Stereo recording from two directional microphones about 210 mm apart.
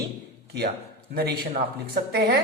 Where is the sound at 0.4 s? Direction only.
50° right (ahead or behind).